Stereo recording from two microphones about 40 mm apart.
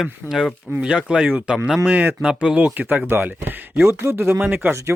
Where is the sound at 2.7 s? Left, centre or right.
Right.